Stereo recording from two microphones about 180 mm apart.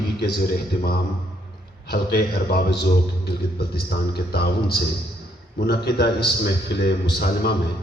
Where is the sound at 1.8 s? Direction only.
60° left (ahead or behind).